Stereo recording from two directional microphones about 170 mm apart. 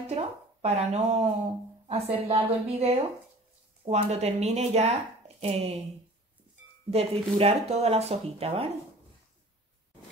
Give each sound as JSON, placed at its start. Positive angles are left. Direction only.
{"t": 0.1, "sound": "speech", "side_deg": -35}
{"t": 6.9, "sound": "speech", "side_deg": -35}